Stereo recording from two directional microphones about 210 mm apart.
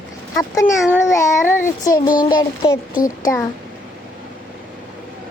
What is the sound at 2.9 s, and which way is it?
Speech, 40° left (ahead or behind).